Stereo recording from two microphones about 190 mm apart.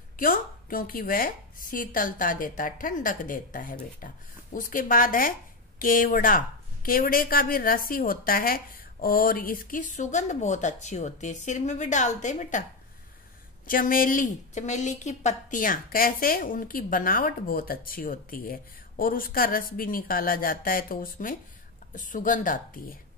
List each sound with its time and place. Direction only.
0.2 s a woman's voice: 45° left (ahead or behind)
13.7 s a woman's voice: 45° left (ahead or behind)